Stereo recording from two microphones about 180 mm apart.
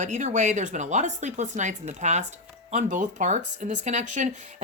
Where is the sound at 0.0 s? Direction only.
40° right (ahead or behind).